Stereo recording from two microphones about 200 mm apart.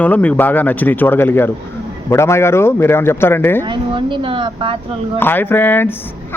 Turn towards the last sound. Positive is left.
turn(degrees=10)  # may be behind; listen again after turning